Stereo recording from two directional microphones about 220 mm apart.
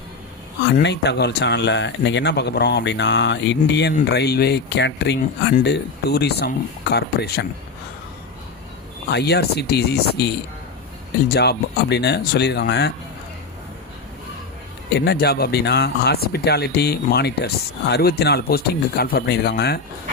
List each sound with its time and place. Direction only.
0.8 s speech: 50° left (ahead or behind)
9.0 s speech: 50° left (ahead or behind)
14.9 s speech: 50° left (ahead or behind)